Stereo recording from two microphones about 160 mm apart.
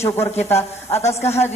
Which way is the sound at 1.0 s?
40° left (ahead or behind).